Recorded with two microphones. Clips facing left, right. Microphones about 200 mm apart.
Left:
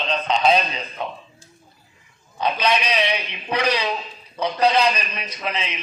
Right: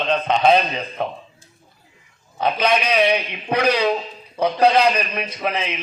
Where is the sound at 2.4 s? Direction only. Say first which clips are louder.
Right 2 dB; 50° right (ahead or behind).